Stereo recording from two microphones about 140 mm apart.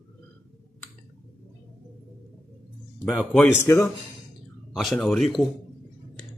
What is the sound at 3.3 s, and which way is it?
Speech, 20° left (ahead or behind).